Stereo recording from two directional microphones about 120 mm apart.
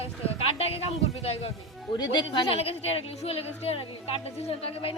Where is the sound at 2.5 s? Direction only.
55° left (ahead or behind).